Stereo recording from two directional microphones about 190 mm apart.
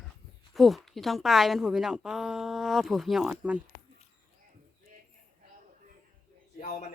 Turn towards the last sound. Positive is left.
turn(degrees=40)  # may be behind; listen again after turning